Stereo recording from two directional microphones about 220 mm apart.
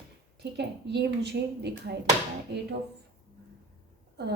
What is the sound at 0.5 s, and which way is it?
A woman's voice, 50° right (ahead or behind).